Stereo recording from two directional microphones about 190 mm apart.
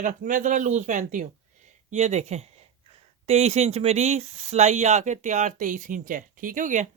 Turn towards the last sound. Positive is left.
turn(degrees=-40)  # may be behind; listen again after turning